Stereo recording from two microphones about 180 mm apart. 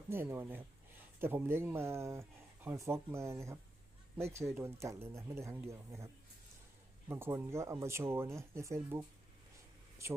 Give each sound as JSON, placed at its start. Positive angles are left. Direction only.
{"t": 0.1, "sound": "speech", "side_deg": -10}
{"t": 7.1, "sound": "speech", "side_deg": -15}